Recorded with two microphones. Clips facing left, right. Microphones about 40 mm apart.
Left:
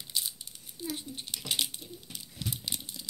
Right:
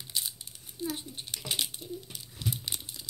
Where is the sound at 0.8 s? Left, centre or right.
Right.